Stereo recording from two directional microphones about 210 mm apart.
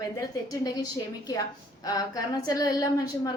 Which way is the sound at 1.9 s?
15° left (ahead or behind).